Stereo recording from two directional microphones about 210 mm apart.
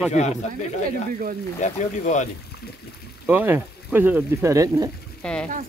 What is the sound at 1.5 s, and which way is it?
Speech, 35° left (ahead or behind).